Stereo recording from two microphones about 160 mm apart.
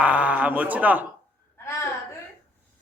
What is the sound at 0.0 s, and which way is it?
Speech, 10° right (ahead or behind).